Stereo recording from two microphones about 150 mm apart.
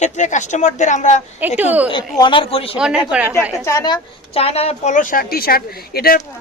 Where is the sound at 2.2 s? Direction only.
35° left (ahead or behind).